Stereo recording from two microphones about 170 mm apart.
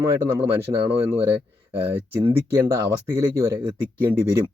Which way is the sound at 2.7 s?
15° right (ahead or behind).